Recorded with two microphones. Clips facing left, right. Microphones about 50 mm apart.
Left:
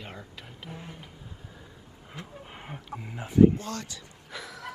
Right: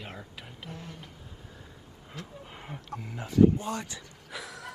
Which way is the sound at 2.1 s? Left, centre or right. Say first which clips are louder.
Left 1 dB; centre.